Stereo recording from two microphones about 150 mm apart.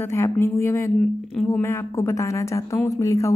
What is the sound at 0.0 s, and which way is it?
A woman's voice, 20° left (ahead or behind).